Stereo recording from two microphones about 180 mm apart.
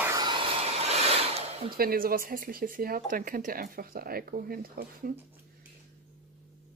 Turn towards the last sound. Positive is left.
turn(degrees=-55)  # may be behind; listen again after turning